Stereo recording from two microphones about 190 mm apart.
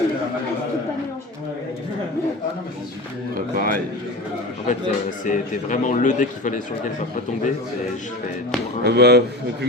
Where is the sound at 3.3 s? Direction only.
50° right (ahead or behind).